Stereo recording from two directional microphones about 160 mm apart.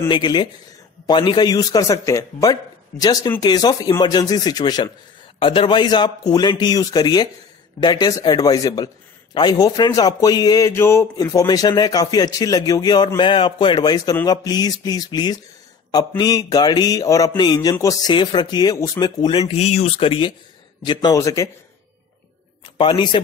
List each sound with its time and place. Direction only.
0.1 s a man's voice: 25° left (ahead or behind)
22.8 s speech: 30° left (ahead or behind)